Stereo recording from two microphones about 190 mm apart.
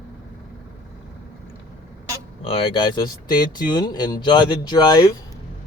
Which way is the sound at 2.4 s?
30° left (ahead or behind).